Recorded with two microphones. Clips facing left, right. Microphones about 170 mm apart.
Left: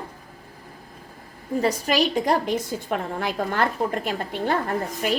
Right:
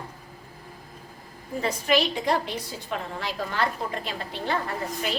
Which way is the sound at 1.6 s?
40° left (ahead or behind).